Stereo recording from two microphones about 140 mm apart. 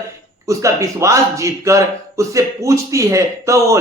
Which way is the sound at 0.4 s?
20° right (ahead or behind).